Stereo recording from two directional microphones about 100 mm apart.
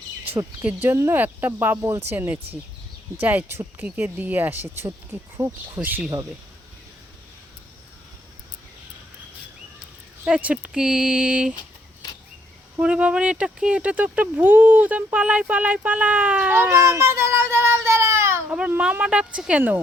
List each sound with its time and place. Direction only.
0.6 s speech: 20° right (ahead or behind)
10.2 s speech: 10° right (ahead or behind)
12.8 s speech: 10° right (ahead or behind); by 18.4 s 25° right (ahead or behind)
18.7 s speech: 15° right (ahead or behind)